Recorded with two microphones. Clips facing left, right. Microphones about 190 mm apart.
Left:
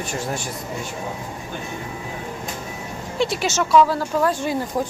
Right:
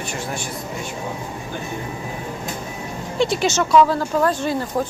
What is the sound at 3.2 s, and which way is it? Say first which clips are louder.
Speech: right 3 dB; 5° left (ahead or behind).